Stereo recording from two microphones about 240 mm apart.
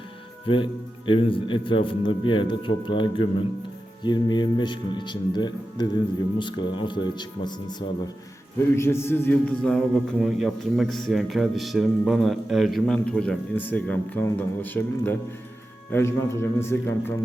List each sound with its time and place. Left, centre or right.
0.4 s a man's voice: left